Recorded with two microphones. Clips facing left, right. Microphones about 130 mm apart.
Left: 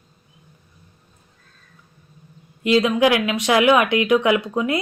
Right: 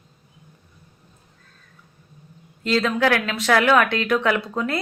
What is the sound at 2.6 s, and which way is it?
Speech, 15° left (ahead or behind).